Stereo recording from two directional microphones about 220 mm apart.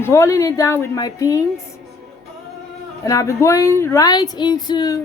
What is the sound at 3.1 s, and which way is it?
A woman's voice, 15° left (ahead or behind).